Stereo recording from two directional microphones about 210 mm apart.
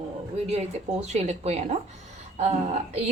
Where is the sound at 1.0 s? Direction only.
30° right (ahead or behind).